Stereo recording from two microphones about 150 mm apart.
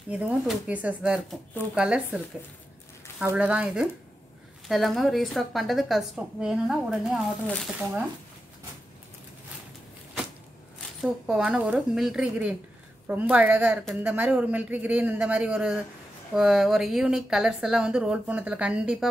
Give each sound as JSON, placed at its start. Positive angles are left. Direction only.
{"t": 0.1, "sound": "a man's voice", "side_deg": -10}
{"t": 11.0, "sound": "a man's voice", "side_deg": -5}